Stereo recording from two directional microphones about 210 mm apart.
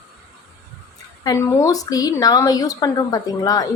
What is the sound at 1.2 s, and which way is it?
A woman's voice, 15° left (ahead or behind).